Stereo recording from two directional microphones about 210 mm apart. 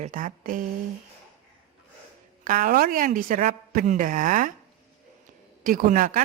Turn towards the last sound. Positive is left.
turn(degrees=-40)  # may be behind; listen again after turning